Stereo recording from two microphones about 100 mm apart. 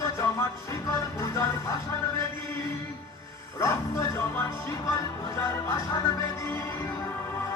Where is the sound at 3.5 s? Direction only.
30° left (ahead or behind).